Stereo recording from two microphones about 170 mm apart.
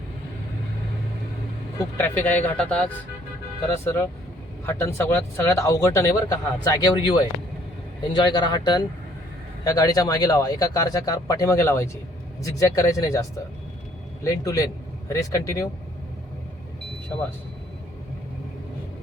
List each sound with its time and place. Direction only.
2.0 s a man's voice: 10° left (ahead or behind)